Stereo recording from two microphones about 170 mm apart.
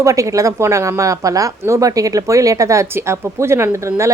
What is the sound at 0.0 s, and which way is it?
Speech, 20° right (ahead or behind).